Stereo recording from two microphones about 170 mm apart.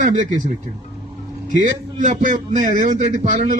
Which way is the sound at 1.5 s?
50° right (ahead or behind).